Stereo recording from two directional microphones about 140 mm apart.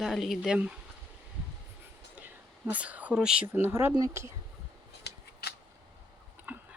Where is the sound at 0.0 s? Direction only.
Centre (ahead or behind).